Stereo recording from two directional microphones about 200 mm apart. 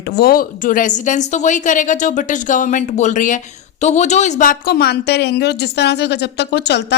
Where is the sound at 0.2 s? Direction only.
45° left (ahead or behind).